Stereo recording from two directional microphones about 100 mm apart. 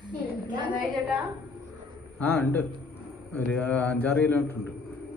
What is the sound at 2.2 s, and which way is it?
A man's voice, 20° left (ahead or behind).